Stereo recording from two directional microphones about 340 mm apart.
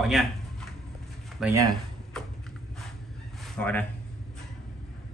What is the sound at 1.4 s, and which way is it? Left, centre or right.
Speech, centre.